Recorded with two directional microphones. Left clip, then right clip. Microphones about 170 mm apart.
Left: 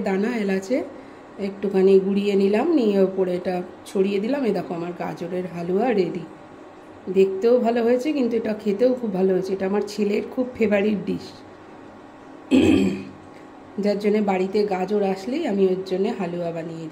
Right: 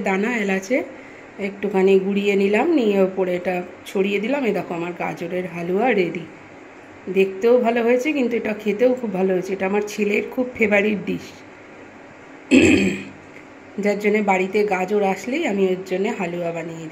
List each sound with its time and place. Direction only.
0.0 s a woman's voice: 5° left (ahead or behind)
7.4 s a woman's voice: 5° left (ahead or behind)
12.4 s throat clearing: 15° right (ahead or behind)
13.7 s speech: 5° left (ahead or behind)